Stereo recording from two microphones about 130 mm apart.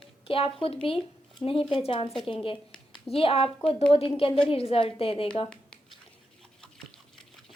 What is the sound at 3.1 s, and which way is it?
A woman's voice, 45° left (ahead or behind).